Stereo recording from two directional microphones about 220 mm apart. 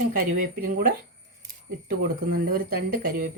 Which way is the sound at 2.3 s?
45° right (ahead or behind).